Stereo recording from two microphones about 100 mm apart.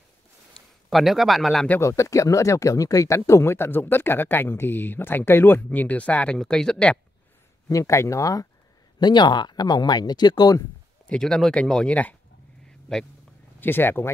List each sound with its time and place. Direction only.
0.8 s speech: centre (ahead or behind)
1.8 s speech: 30° left (ahead or behind); by 7.0 s 10° left (ahead or behind)
7.6 s speech: 35° left (ahead or behind)
9.0 s speech: 50° left (ahead or behind)
11.1 s speech: 5° left (ahead or behind)
13.6 s speech: 20° left (ahead or behind)